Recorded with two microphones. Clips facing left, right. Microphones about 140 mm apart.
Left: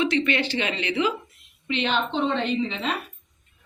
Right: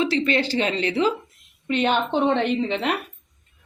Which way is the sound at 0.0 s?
35° right (ahead or behind).